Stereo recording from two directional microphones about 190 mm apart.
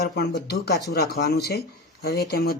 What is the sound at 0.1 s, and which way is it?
Speech, 60° left (ahead or behind).